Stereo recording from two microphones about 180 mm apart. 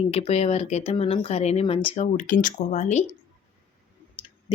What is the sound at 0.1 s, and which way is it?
Speech, 35° left (ahead or behind).